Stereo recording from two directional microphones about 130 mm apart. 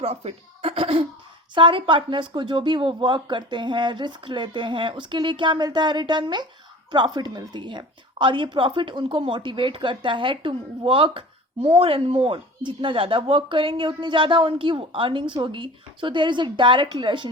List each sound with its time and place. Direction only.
0.0 s a woman's voice: 50° right (ahead or behind)